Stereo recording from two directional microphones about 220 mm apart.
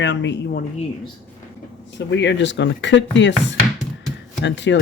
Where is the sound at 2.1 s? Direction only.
55° left (ahead or behind).